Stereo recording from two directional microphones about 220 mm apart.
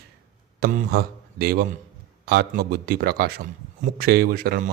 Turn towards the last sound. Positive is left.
turn(degrees=-40)  # may be behind; listen again after turning